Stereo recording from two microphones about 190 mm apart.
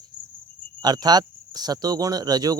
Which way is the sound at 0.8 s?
20° right (ahead or behind).